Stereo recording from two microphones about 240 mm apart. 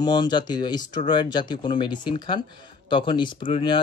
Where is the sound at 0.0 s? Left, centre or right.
Centre.